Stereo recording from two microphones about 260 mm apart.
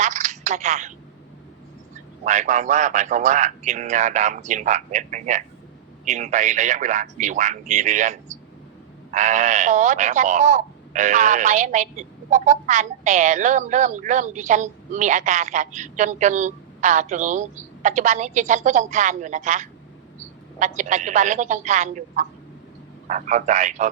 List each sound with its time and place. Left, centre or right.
0.0 s telephone: right
2.2 s speech: right